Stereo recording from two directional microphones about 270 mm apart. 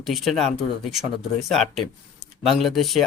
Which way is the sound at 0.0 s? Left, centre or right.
Centre.